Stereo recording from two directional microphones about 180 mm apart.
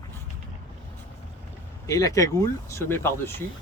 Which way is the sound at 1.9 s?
20° left (ahead or behind).